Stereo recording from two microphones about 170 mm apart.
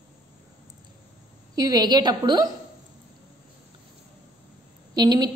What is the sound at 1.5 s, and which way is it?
Speech, 20° right (ahead or behind).